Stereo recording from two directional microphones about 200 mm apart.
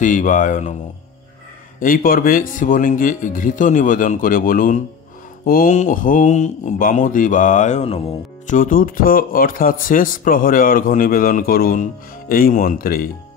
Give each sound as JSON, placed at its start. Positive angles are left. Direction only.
{"t": 0.0, "sound": "speech", "side_deg": 40}
{"t": 1.8, "sound": "speech", "side_deg": 45}